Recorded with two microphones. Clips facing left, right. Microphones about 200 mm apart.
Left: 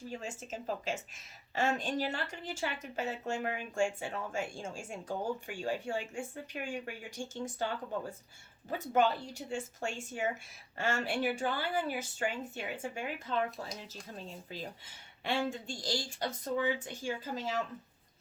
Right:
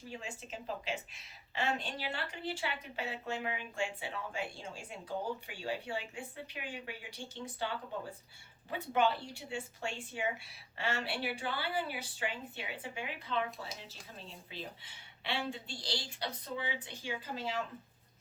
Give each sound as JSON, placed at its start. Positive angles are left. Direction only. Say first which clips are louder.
{"t": 0.1, "sound": "a woman's voice", "louder": "left 2 dB", "side_deg": 45}